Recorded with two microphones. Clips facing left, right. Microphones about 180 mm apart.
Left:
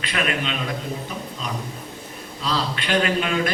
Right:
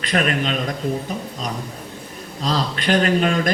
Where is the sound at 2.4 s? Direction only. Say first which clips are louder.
Right 3 dB; 40° right (ahead or behind).